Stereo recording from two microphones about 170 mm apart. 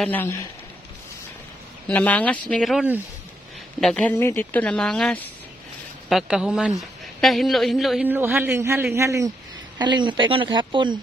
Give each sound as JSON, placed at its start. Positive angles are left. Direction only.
{"t": 0.0, "sound": "speech", "side_deg": 10}
{"t": 1.9, "sound": "speech", "side_deg": 10}
{"t": 8.1, "sound": "a man's voice", "side_deg": -10}